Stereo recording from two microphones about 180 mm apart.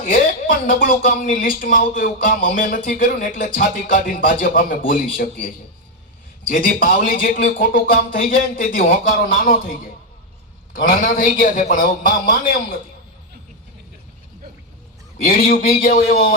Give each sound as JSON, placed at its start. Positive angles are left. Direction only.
{"t": 0.7, "sound": "speech", "side_deg": 50}
{"t": 6.5, "sound": "speech", "side_deg": 50}
{"t": 15.2, "sound": "speech", "side_deg": 50}